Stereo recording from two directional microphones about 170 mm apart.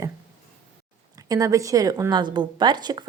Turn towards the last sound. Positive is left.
turn(degrees=-25)  # may be behind; listen again after turning